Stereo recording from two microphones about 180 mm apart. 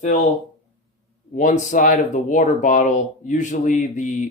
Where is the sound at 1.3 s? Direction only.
45° left (ahead or behind).